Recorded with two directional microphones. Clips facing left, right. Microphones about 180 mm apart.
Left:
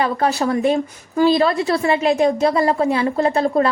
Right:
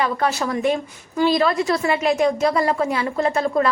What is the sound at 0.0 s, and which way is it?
A woman's voice, 35° left (ahead or behind).